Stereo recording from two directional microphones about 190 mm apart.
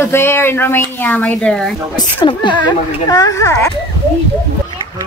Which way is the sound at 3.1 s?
15° left (ahead or behind).